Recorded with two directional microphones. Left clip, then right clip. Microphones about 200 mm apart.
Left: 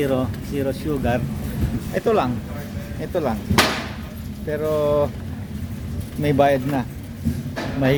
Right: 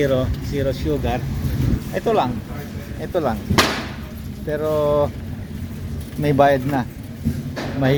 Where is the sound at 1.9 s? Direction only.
20° left (ahead or behind).